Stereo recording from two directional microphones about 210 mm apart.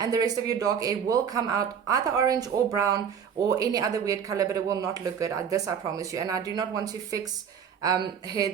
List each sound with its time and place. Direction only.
0.0 s speech: 15° right (ahead or behind)